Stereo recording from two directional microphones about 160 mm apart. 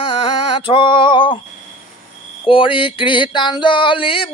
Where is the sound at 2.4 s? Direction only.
35° left (ahead or behind).